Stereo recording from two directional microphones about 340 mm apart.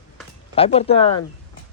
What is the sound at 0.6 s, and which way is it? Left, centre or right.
Speech, centre.